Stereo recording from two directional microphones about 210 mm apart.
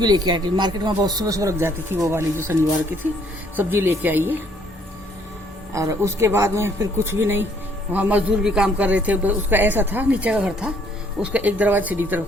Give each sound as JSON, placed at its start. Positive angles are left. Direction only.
{"t": 0.0, "sound": "a man's voice", "side_deg": -20}
{"t": 5.7, "sound": "a man's voice", "side_deg": -15}